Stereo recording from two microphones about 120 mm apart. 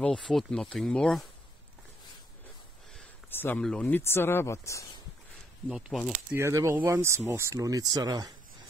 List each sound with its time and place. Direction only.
0.0 s speech: 5° left (ahead or behind)
3.3 s a sound: 15° left (ahead or behind)
3.6 s speech: 5° left (ahead or behind)
3.9 s speech: 20° left (ahead or behind)
5.7 s speech: 5° right (ahead or behind)
6.3 s speech: 25° right (ahead or behind)